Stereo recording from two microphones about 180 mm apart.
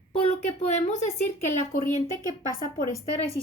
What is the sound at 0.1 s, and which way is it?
A woman's voice, 35° left (ahead or behind).